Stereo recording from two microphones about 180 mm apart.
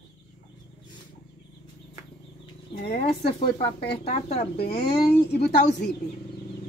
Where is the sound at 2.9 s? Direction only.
30° left (ahead or behind).